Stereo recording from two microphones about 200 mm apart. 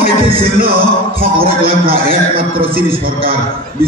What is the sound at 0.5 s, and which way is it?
Speech, 45° right (ahead or behind).